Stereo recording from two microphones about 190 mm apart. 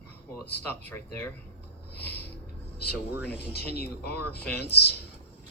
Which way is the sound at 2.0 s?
60° left (ahead or behind).